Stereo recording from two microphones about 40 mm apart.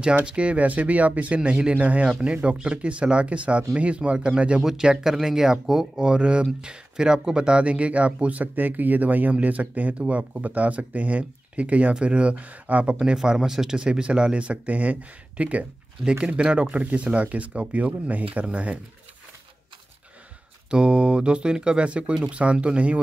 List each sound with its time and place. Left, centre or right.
0.2 s speech: right
2.4 s speech: right
4.6 s speech: centre; by 12.9 s right
13.0 s speech: centre
20.7 s speech: right